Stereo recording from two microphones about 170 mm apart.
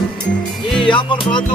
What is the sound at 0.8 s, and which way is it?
Music, 30° left (ahead or behind).